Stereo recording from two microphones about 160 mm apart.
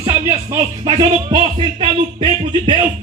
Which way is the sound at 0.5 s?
25° right (ahead or behind).